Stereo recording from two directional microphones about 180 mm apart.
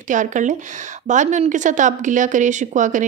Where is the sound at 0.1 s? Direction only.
45° right (ahead or behind).